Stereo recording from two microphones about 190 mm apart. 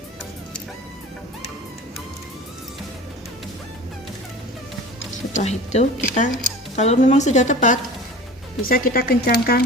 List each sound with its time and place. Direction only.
5.3 s speech: 35° left (ahead or behind); by 9.6 s 55° left (ahead or behind)